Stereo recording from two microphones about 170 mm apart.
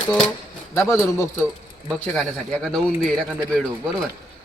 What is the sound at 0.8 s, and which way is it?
Speech, 15° left (ahead or behind).